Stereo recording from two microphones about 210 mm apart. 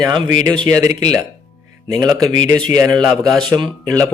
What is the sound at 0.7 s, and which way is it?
Speech, 10° right (ahead or behind).